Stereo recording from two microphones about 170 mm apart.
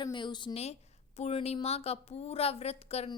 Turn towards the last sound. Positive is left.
turn(degrees=35)  # may be behind; listen again after turning